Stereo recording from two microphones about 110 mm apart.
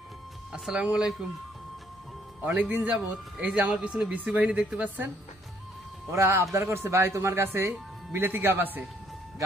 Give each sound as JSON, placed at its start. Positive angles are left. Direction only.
{"t": 0.5, "sound": "speech", "side_deg": -5}
{"t": 2.7, "sound": "speech", "side_deg": -15}
{"t": 6.1, "sound": "speech", "side_deg": -25}